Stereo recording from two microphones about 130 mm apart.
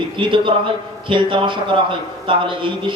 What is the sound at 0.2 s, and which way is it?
A man's voice, 40° right (ahead or behind).